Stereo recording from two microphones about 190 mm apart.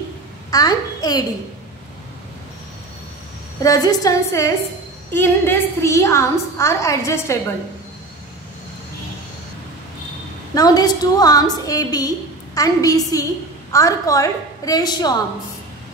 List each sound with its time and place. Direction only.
0.5 s a child's voice: 20° left (ahead or behind)
3.6 s a woman's voice: 20° left (ahead or behind)
10.5 s a woman's voice: 20° left (ahead or behind)